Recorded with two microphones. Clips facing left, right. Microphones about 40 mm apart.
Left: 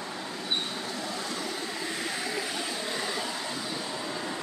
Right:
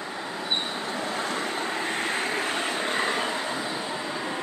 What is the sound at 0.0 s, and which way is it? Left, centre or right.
Vehicle, right.